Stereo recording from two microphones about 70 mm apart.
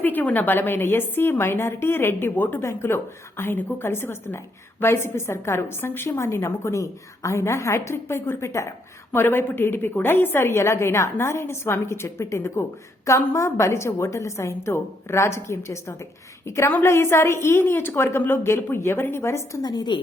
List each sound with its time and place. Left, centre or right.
0.0 s a woman's voice: left
9.1 s a woman's voice: left
19.6 s a woman's voice: left